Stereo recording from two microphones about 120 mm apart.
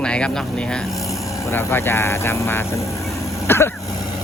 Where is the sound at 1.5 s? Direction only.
20° left (ahead or behind).